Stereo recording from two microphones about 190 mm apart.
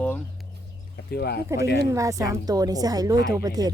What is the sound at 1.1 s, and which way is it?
Speech, 55° left (ahead or behind).